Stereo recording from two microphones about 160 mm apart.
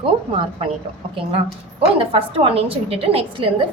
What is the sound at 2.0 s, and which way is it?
A woman's voice, 35° right (ahead or behind).